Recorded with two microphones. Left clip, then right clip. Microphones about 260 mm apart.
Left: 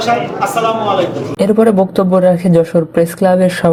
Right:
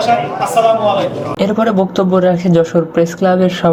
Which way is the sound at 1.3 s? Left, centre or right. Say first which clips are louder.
Left 4 dB; centre.